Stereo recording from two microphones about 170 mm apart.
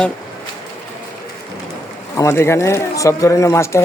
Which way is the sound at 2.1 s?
15° left (ahead or behind).